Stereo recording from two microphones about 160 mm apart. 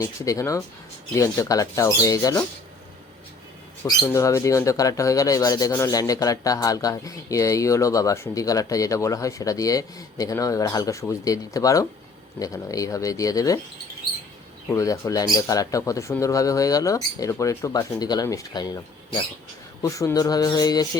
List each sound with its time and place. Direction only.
0.0 s speech: 20° left (ahead or behind)
4.0 s speech: 15° left (ahead or behind)
14.7 s speech: 20° left (ahead or behind)